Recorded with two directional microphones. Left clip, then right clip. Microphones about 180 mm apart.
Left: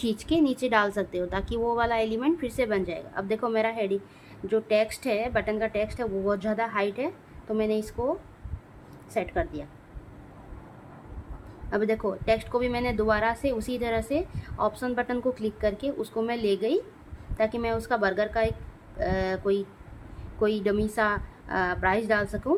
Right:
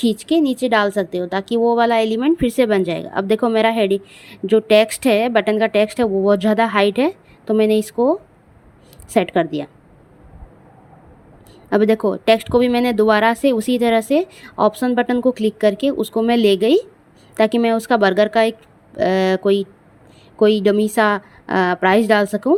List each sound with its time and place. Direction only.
0.0 s a woman's voice: 30° right (ahead or behind)
9.1 s a woman's voice: 50° right (ahead or behind)
11.7 s a woman's voice: 40° right (ahead or behind)